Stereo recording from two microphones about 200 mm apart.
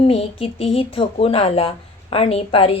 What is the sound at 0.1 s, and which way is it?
A woman's voice, 30° left (ahead or behind).